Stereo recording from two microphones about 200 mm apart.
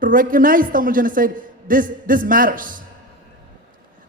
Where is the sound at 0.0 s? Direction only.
45° right (ahead or behind).